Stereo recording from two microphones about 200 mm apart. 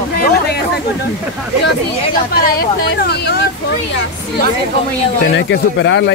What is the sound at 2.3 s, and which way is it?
Speech, 50° left (ahead or behind).